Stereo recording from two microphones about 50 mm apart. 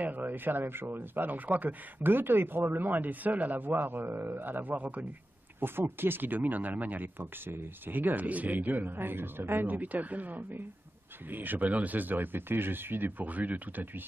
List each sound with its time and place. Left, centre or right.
0.0 s speech: right
5.6 s speech: right